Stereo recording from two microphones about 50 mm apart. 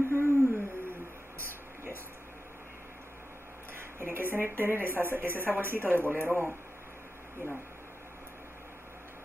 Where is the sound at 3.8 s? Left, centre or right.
Right.